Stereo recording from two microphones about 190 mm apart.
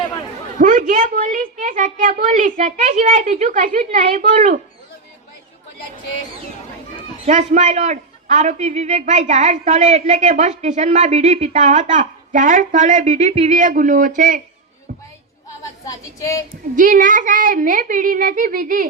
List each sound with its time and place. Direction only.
0.6 s a woman's voice: 45° right (ahead or behind)
7.3 s a man's voice: 40° right (ahead or behind)
14.9 s a sound: 55° right (ahead or behind)
15.8 s speech: 15° left (ahead or behind)
16.7 s a woman's voice: 45° right (ahead or behind)